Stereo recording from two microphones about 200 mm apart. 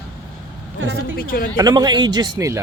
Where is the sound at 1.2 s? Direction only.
50° left (ahead or behind).